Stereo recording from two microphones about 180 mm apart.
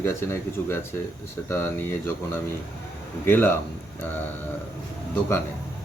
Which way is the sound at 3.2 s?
10° left (ahead or behind).